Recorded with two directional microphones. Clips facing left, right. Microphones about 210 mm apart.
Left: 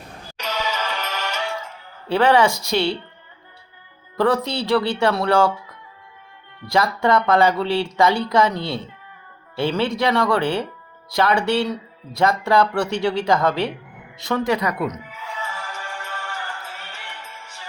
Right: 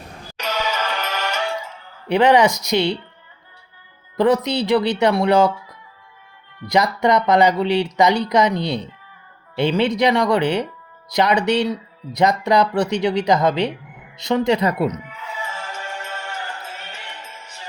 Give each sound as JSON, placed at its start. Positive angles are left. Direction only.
{"t": 0.3, "sound": "music", "side_deg": -50}
{"t": 2.0, "sound": "speech", "side_deg": -15}
{"t": 4.2, "sound": "speech", "side_deg": -15}
{"t": 6.7, "sound": "speech", "side_deg": -20}
{"t": 15.1, "sound": "music", "side_deg": 0}
{"t": 15.4, "sound": "music", "side_deg": -20}